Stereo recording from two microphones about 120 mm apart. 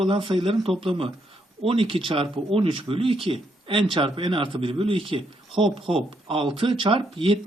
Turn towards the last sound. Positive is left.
turn(degrees=-50)  # may be behind; listen again after turning